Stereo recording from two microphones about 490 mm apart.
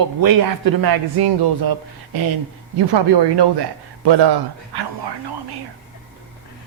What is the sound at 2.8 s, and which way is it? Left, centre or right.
A man's voice, right.